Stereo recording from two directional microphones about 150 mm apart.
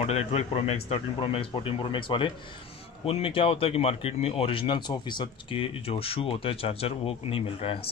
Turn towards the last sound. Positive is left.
turn(degrees=40)  # may be behind; listen again after turning